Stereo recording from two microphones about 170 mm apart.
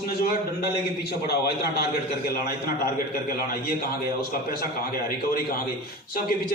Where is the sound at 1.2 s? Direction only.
65° left (ahead or behind).